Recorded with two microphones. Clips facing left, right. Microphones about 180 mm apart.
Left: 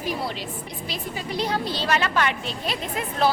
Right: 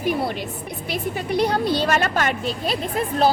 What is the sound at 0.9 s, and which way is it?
A woman's voice, 55° right (ahead or behind).